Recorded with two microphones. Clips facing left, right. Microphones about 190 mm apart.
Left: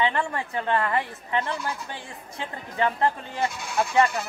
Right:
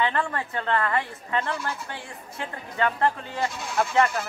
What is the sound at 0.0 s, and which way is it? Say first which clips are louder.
A woman's voice: even; 15° left (ahead or behind).